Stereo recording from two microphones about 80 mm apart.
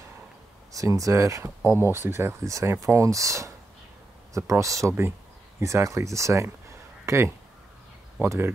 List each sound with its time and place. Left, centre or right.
0.7 s speech: right
1.6 s speech: right